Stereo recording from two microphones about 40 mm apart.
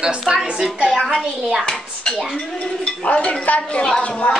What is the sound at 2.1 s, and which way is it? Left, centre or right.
Speech, left.